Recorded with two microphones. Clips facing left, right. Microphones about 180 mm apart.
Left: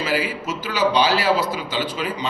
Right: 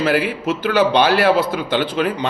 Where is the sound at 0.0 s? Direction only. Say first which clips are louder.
Right 5 dB; 60° right (ahead or behind).